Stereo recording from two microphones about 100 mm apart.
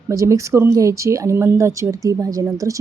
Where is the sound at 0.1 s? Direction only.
30° right (ahead or behind).